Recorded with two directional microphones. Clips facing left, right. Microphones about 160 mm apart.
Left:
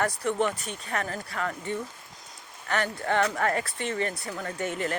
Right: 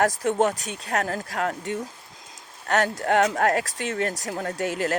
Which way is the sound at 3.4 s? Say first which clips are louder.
Right 4 dB; 80° right.